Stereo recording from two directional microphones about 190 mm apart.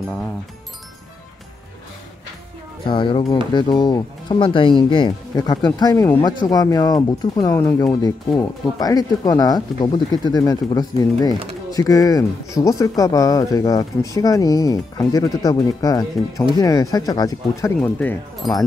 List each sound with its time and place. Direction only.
2.9 s speech: 25° left (ahead or behind); by 18.5 s 5° left (ahead or behind)